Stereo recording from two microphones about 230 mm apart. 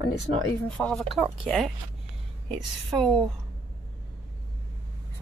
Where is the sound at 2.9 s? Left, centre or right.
Centre.